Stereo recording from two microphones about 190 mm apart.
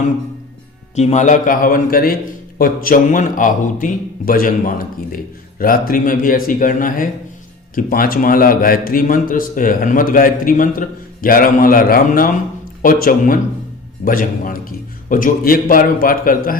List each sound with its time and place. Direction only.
0.9 s a man's voice: 35° left (ahead or behind)